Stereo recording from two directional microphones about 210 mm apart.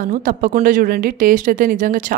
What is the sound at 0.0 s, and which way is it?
Speech, 40° right (ahead or behind).